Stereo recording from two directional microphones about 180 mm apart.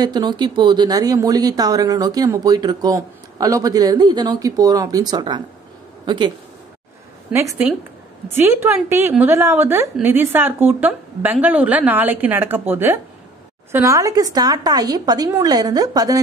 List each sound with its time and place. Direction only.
0.0 s speech: 25° right (ahead or behind)
7.3 s a woman's voice: 5° right (ahead or behind)
8.4 s a woman's voice: 15° right (ahead or behind)